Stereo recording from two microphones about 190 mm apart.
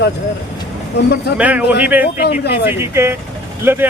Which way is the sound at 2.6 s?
10° right (ahead or behind).